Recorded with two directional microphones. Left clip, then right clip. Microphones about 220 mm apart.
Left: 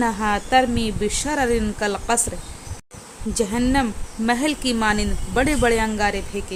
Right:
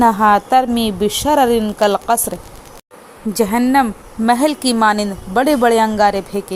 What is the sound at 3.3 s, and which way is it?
Speech, 20° right (ahead or behind).